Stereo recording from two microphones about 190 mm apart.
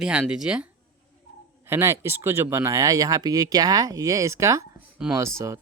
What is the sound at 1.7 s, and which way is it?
A man's voice, 15° right (ahead or behind).